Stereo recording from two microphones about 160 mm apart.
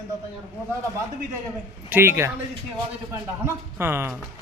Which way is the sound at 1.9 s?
15° right (ahead or behind).